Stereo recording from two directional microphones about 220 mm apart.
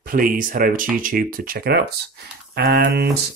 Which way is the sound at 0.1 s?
40° right (ahead or behind).